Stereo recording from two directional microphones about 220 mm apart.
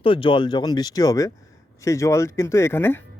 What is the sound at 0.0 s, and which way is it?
Speech, 25° left (ahead or behind).